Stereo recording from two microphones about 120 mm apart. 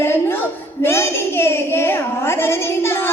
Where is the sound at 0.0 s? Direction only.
20° left (ahead or behind).